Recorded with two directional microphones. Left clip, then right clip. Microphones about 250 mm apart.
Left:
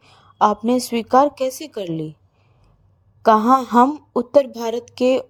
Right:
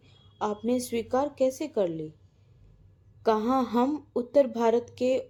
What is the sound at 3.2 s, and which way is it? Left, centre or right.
A woman's voice, left.